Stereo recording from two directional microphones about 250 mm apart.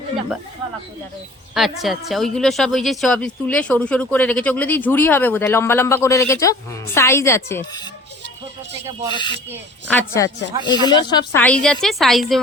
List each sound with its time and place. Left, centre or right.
1.5 s a woman's voice: centre
9.1 s a woman's voice: centre
11.4 s a woman's voice: centre